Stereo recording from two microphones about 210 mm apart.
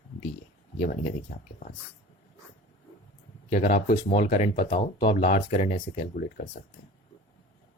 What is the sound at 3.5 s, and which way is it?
Speech, 30° left (ahead or behind).